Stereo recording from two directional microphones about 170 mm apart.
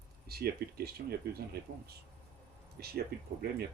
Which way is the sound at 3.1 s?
75° right (ahead or behind).